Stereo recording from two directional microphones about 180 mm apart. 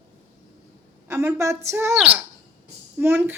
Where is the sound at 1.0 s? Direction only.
15° right (ahead or behind).